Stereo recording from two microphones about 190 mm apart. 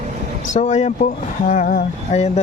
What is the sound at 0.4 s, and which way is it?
Speech, 40° left (ahead or behind).